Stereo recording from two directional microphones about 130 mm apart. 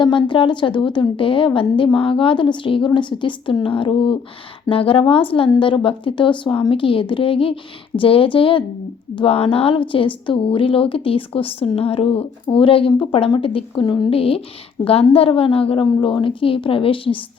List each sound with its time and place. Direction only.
0.0 s a woman's voice: 40° left (ahead or behind)